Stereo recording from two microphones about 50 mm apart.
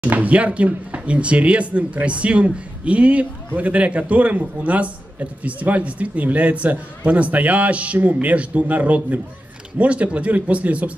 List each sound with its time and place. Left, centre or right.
0.0 s speech: right